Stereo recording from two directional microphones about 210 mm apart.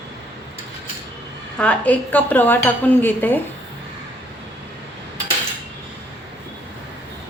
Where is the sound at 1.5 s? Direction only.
5° left (ahead or behind).